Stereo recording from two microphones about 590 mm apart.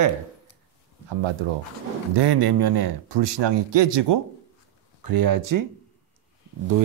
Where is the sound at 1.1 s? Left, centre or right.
Right.